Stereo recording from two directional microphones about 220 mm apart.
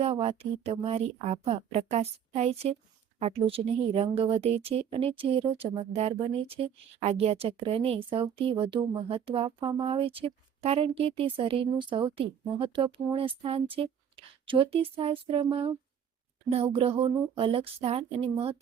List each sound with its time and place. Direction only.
0.0 s a woman's voice: 25° right (ahead or behind)